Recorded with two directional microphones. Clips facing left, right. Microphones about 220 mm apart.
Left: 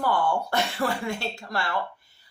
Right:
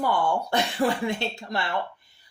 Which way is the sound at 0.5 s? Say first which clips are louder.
Right 2 dB; 20° right (ahead or behind).